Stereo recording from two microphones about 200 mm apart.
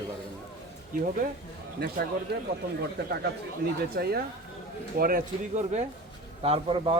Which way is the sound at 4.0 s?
50° right (ahead or behind).